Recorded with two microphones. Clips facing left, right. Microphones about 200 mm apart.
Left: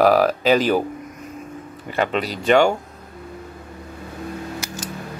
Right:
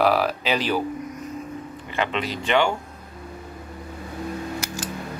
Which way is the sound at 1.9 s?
40° left (ahead or behind).